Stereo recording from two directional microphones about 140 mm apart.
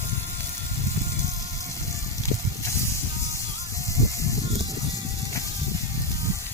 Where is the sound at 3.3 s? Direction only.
20° left (ahead or behind).